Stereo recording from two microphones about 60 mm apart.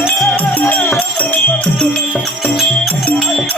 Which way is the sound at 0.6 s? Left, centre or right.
Left.